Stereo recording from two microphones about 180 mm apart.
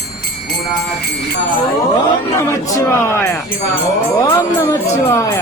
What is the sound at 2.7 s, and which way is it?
Speech, 15° left (ahead or behind).